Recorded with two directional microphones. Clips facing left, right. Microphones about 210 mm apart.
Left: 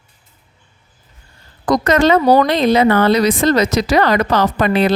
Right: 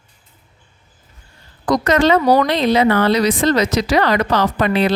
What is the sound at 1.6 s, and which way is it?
A woman's voice, 45° left (ahead or behind).